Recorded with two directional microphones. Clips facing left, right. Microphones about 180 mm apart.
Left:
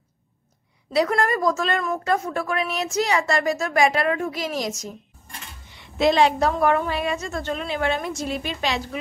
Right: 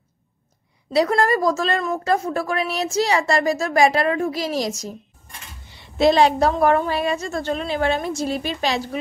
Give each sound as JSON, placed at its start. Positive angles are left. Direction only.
{"t": 0.9, "sound": "a woman's voice", "side_deg": -35}